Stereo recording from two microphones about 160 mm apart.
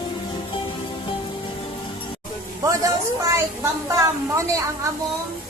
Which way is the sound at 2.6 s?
20° right (ahead or behind).